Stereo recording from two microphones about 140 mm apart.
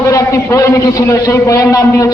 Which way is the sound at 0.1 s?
20° left (ahead or behind).